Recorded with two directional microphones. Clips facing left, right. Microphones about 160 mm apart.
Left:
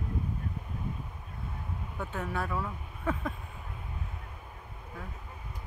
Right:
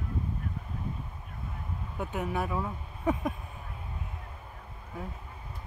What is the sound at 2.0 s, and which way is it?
Speech, 15° right (ahead or behind).